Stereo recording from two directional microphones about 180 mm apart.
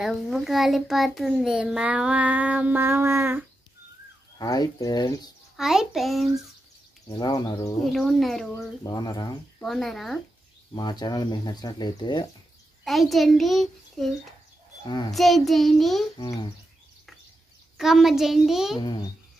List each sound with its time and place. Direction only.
0.0 s a child's voice: centre (ahead or behind)
4.4 s speech: 20° left (ahead or behind)
5.6 s a child's voice: centre (ahead or behind)
7.1 s speech: 25° left (ahead or behind)
7.8 s a child's voice: centre (ahead or behind)
8.8 s speech: 25° left (ahead or behind)
9.6 s a child's voice: centre (ahead or behind)
10.7 s speech: 25° left (ahead or behind)
12.8 s a child's voice: centre (ahead or behind)
16.2 s speech: 25° left (ahead or behind)
17.7 s a child's voice: centre (ahead or behind)
18.8 s speech: 25° left (ahead or behind)